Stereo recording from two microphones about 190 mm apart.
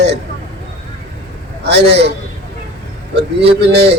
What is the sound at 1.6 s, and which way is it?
A man's voice, 65° right (ahead or behind).